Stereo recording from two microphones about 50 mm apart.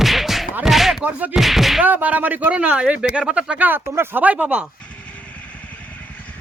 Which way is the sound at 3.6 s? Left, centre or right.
Right.